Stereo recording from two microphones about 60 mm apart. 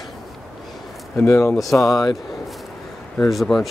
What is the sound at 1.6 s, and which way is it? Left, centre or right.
Speech, left.